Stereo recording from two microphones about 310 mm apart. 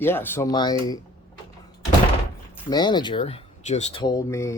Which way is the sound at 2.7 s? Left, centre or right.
Centre.